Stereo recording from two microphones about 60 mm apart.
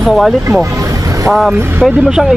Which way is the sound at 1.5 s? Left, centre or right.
Right.